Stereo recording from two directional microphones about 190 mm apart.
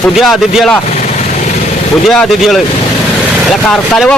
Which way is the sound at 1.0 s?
40° left (ahead or behind).